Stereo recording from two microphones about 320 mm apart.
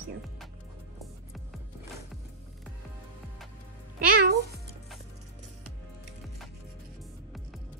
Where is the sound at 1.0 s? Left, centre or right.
Centre.